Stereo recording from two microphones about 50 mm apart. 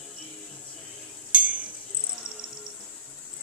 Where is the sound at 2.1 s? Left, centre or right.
Centre.